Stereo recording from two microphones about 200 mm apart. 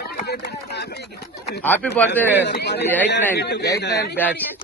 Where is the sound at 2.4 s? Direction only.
55° left (ahead or behind).